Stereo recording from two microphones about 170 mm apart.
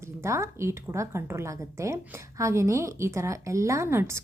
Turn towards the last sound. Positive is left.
turn(degrees=-15)  # may be behind; listen again after turning